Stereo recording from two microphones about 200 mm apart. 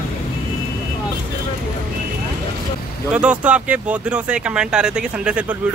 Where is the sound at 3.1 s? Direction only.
5° right (ahead or behind).